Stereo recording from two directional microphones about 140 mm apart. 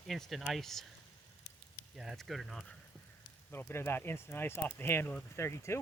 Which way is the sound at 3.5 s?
20° left (ahead or behind).